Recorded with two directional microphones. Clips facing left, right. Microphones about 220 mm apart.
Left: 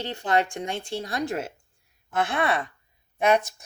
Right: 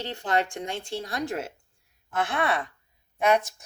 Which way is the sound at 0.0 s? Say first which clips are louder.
Left 2 dB; 15° left (ahead or behind).